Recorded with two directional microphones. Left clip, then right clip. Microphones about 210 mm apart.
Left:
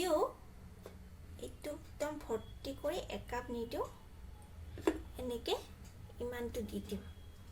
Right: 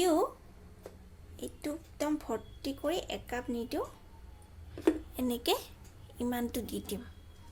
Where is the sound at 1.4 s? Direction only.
40° right (ahead or behind).